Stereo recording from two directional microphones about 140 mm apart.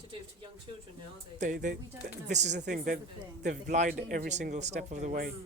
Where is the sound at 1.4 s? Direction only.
65° right (ahead or behind).